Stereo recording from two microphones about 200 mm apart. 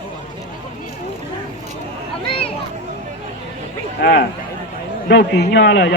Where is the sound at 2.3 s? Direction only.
25° left (ahead or behind).